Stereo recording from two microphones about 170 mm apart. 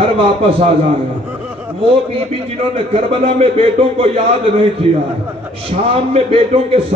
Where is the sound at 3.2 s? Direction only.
35° right (ahead or behind).